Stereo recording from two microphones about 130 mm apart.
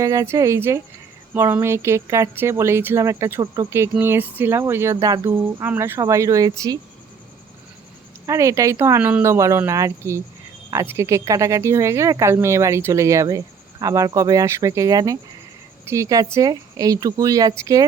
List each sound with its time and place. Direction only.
0.0 s speech: 25° right (ahead or behind)
4.9 s speech: 30° right (ahead or behind)
5.2 s speech: 20° right (ahead or behind)
8.3 s speech: 25° right (ahead or behind)